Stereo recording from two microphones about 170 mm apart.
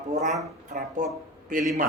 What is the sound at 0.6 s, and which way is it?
Speech, 45° right (ahead or behind).